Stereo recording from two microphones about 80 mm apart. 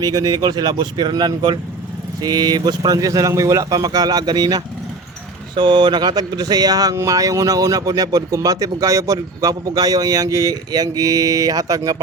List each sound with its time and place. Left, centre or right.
0.0 s speech: right
5.5 s speech: right